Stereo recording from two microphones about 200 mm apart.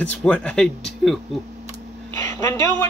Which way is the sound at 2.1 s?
15° left (ahead or behind).